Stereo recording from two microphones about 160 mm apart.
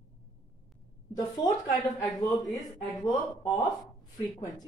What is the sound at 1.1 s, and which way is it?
Speech, 25° left (ahead or behind).